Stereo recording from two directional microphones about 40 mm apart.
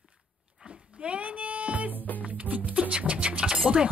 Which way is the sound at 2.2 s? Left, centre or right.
Right.